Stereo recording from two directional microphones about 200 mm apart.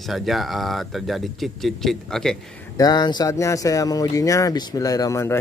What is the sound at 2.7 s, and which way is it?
Speech, 20° left (ahead or behind).